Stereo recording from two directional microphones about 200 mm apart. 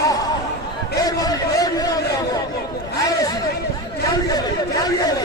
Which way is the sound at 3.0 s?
20° left (ahead or behind).